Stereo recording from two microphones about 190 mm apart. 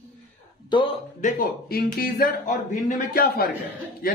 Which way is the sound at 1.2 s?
45° left (ahead or behind).